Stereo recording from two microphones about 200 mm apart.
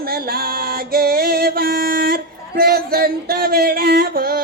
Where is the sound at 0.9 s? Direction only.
50° right (ahead or behind).